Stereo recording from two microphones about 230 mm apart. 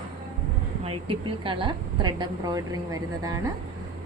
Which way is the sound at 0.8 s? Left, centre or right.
Right.